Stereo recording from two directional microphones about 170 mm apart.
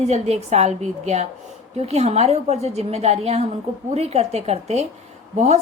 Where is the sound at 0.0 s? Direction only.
40° right (ahead or behind).